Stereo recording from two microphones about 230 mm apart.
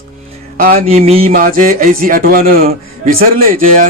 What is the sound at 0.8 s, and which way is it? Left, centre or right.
Speech, right.